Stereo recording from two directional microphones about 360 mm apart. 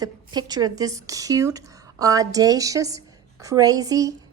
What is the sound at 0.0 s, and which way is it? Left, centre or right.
A woman's voice, centre.